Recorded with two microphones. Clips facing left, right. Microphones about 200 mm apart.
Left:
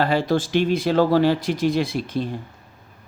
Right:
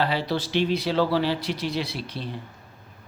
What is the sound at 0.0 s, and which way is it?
Speech, 50° left (ahead or behind).